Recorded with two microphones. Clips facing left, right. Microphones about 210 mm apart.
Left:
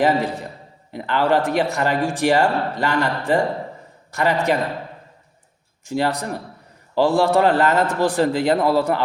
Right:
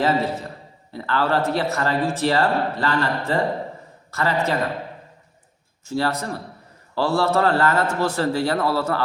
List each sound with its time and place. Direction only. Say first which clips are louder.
0.0 s speech: left 2 dB; 15° left (ahead or behind)
5.8 s speech: left 2 dB; 15° left (ahead or behind)